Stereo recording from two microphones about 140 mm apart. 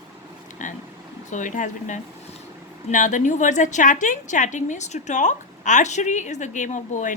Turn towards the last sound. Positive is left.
turn(degrees=60)  # may be behind; listen again after turning